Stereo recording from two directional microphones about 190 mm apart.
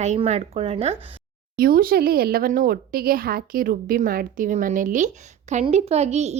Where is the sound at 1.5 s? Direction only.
50° right (ahead or behind).